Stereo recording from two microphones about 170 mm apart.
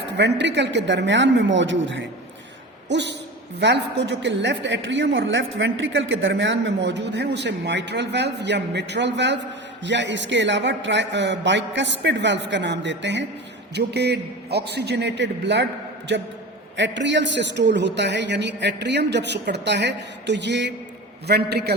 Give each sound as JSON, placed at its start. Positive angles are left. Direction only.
{"t": 0.0, "sound": "a woman's voice", "side_deg": -90}
{"t": 13.7, "sound": "a man's voice", "side_deg": -75}
{"t": 16.7, "sound": "a woman's voice", "side_deg": -90}
{"t": 21.2, "sound": "a man's voice", "side_deg": -70}